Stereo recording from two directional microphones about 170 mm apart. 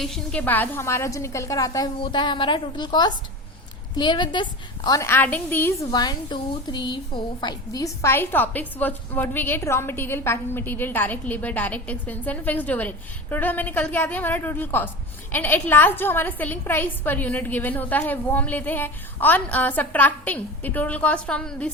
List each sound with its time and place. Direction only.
0.0 s a woman's voice: centre (ahead or behind)
5.9 s a woman's voice: 25° left (ahead or behind); by 21.7 s 5° left (ahead or behind)